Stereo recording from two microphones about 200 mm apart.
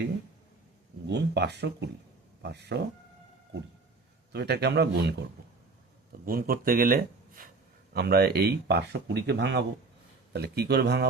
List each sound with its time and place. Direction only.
1.0 s a man's voice: 60° right (ahead or behind)
4.3 s a man's voice: 55° right (ahead or behind)
6.2 s a man's voice: 45° right (ahead or behind)